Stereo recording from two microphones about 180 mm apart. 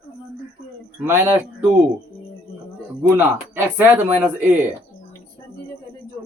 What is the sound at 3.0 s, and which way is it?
Speech, 10° right (ahead or behind).